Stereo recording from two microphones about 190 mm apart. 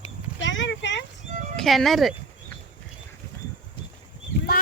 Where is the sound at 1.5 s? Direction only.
Centre (ahead or behind).